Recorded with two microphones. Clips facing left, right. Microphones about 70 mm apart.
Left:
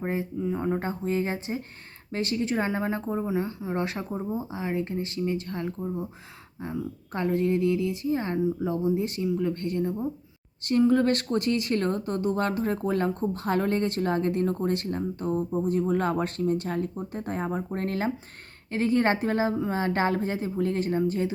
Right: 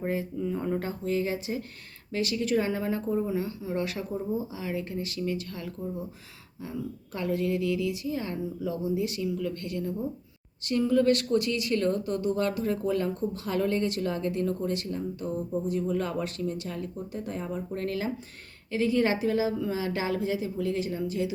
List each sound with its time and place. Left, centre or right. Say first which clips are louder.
0.0 s a woman's voice: left 1 dB; left